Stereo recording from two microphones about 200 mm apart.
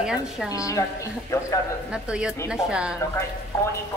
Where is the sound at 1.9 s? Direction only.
5° right (ahead or behind).